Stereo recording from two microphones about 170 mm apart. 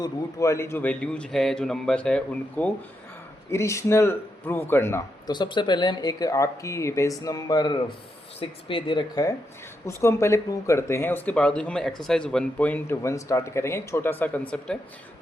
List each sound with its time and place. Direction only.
0.0 s a man's voice: 20° left (ahead or behind)